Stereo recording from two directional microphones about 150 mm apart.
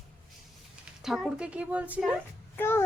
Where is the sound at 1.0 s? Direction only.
Centre (ahead or behind).